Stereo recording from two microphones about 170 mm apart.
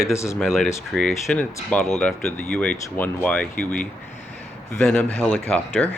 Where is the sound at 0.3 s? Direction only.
5° left (ahead or behind).